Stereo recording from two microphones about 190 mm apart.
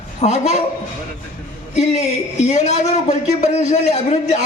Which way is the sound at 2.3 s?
35° left (ahead or behind).